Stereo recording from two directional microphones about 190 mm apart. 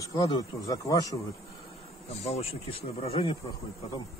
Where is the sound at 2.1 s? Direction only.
35° left (ahead or behind).